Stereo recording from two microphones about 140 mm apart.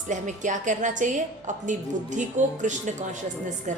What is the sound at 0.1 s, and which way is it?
A woman's voice, 60° right (ahead or behind).